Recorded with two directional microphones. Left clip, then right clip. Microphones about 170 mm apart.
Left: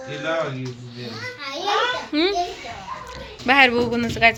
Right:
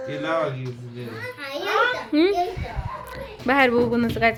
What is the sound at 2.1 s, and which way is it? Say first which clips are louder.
Speech: right 2 dB; 35° right (ahead or behind).